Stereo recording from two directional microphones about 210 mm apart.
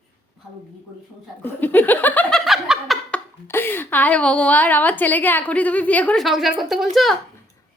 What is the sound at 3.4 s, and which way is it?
A woman's voice, 10° left (ahead or behind).